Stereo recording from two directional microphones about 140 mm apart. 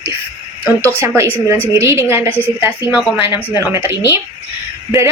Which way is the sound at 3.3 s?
30° left (ahead or behind).